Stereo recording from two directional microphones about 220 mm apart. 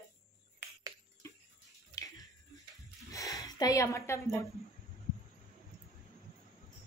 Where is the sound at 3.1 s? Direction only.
15° left (ahead or behind).